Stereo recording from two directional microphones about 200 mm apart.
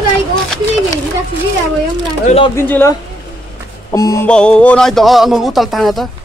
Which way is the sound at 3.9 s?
15° left (ahead or behind).